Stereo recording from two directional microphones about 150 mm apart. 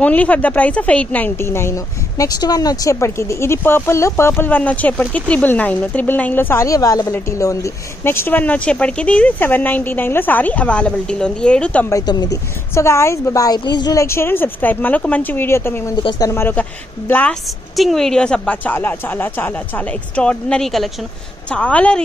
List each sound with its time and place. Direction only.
0.0 s a woman's voice: 10° left (ahead or behind)
11.9 s a woman's voice: 25° left (ahead or behind)
16.0 s speech: 30° left (ahead or behind)
16.3 s a woman's voice: 15° left (ahead or behind)
17.5 s a woman's voice: centre (ahead or behind)